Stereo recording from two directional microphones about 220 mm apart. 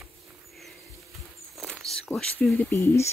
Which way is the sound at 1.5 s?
Centre (ahead or behind).